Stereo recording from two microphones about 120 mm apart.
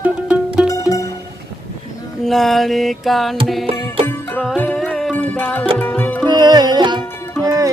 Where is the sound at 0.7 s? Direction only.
30° left (ahead or behind).